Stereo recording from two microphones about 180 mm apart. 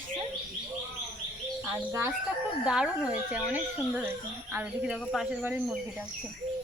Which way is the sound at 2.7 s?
5° right (ahead or behind).